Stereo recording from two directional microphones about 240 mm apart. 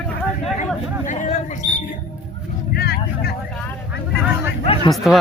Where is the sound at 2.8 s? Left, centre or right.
Left.